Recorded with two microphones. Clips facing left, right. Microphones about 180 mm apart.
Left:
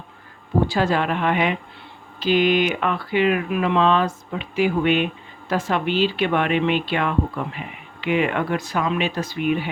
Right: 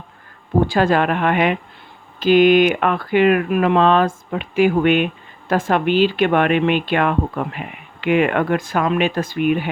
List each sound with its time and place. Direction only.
0.7 s a woman's voice: 55° right (ahead or behind)